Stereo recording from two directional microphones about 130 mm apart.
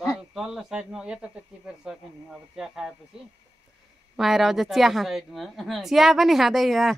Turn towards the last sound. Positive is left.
turn(degrees=0)  # may be behind; listen again after turning